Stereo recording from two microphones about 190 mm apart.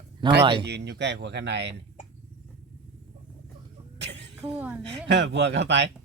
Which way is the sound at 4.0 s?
65° right (ahead or behind).